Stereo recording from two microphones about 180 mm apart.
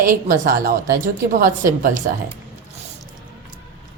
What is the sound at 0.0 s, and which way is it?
A woman's voice, 50° right (ahead or behind).